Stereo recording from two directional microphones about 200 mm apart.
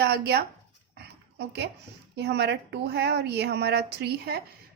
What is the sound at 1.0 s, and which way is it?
Dog, 55° right (ahead or behind).